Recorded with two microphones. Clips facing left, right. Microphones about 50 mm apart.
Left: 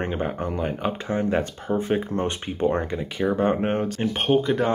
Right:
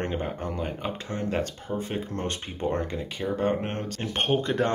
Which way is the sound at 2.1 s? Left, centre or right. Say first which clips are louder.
Left 6 dB; centre.